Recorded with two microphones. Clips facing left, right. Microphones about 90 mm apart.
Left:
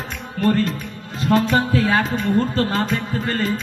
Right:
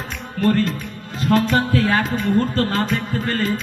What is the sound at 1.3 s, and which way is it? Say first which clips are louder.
Speech: even; 20° left (ahead or behind).